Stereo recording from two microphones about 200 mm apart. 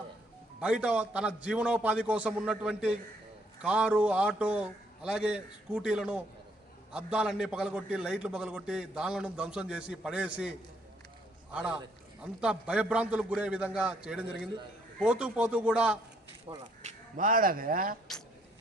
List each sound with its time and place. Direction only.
0.6 s a man's voice: 5° right (ahead or behind)
11.5 s a man's voice: 5° right (ahead or behind)
16.5 s speech: 20° right (ahead or behind)
16.8 s speech: 40° right (ahead or behind)